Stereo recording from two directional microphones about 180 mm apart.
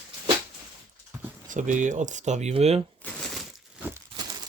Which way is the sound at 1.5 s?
45° right (ahead or behind).